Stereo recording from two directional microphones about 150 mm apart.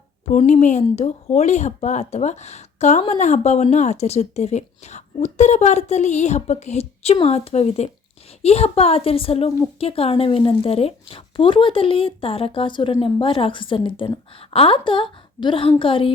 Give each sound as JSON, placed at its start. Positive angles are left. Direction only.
{"t": 0.3, "sound": "speech", "side_deg": 50}